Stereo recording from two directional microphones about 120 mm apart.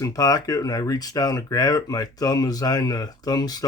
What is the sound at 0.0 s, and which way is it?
Speech, 30° left (ahead or behind).